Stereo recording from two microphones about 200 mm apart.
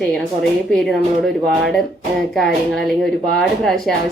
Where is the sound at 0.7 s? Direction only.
Centre (ahead or behind).